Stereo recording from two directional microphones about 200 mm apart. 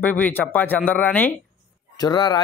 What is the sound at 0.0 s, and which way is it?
A man's voice, 10° left (ahead or behind).